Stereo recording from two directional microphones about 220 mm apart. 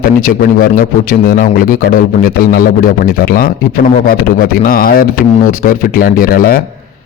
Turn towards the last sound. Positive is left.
turn(degrees=40)  # may be behind; listen again after turning